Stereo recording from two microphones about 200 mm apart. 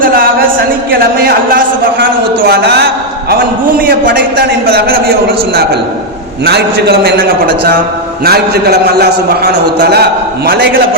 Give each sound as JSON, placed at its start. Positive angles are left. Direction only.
{"t": 0.0, "sound": "a sound", "side_deg": -45}
{"t": 0.9, "sound": "a man's voice", "side_deg": -45}
{"t": 6.4, "sound": "a man's voice", "side_deg": -55}
{"t": 8.2, "sound": "a man's voice", "side_deg": -50}